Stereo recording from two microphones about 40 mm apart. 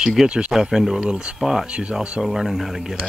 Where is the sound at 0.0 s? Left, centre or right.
Centre.